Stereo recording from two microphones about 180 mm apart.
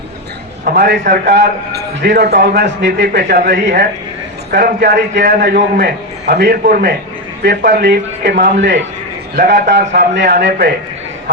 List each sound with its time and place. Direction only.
0.6 s a man's voice: 60° right (ahead or behind)
1.0 s a man's voice: 45° right (ahead or behind)
1.3 s a man's voice: 70° right (ahead or behind)
9.3 s a man's voice: 65° right (ahead or behind)